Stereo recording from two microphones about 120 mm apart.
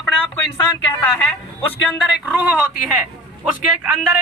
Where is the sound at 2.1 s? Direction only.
10° right (ahead or behind).